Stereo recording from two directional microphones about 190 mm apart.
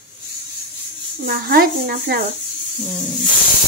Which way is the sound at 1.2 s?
50° right (ahead or behind).